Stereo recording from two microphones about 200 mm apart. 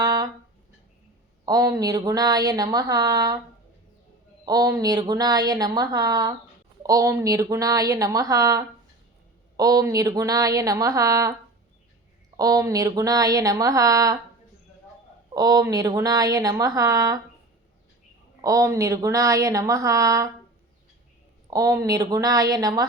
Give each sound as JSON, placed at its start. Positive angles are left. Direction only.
{"t": 0.0, "sound": "a sound", "side_deg": -20}
{"t": 1.5, "sound": "speech", "side_deg": -20}
{"t": 4.4, "sound": "a woman's voice", "side_deg": -20}
{"t": 12.4, "sound": "a woman's voice", "side_deg": -15}
{"t": 15.3, "sound": "a woman's voice", "side_deg": -20}
{"t": 18.4, "sound": "a woman's voice", "side_deg": -15}
{"t": 21.5, "sound": "a woman's voice", "side_deg": -15}